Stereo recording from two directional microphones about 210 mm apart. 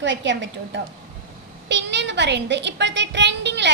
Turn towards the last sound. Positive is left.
turn(degrees=-55)  # may be behind; listen again after turning